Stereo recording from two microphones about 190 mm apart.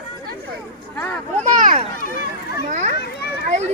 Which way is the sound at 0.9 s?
5° left (ahead or behind).